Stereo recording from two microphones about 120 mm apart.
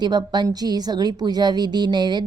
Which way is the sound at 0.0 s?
35° right (ahead or behind).